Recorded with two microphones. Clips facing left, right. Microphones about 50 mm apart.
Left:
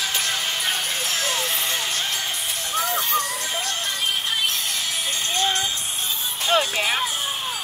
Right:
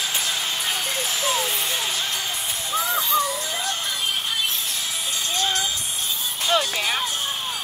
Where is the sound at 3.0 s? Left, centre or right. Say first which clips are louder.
Right 2 dB; left.